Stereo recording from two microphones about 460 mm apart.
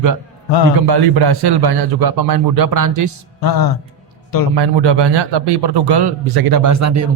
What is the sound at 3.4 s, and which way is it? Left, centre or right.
Speech, left.